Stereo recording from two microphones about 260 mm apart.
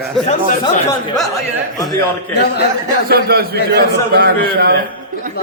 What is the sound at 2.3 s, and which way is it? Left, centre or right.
Speech, left.